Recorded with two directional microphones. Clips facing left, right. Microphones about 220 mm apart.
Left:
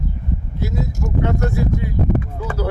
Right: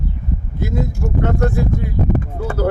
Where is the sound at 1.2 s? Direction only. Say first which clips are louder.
Right 2 dB; 50° right (ahead or behind).